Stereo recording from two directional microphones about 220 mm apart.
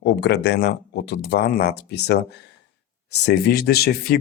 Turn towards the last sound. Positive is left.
turn(degrees=45)  # may be behind; listen again after turning